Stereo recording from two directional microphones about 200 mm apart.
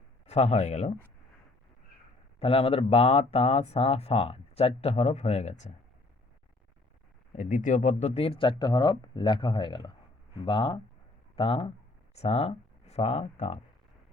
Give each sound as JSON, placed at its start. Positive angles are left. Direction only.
{"t": 0.3, "sound": "speech", "side_deg": 30}
{"t": 2.4, "sound": "speech", "side_deg": 30}
{"t": 7.3, "sound": "speech", "side_deg": 40}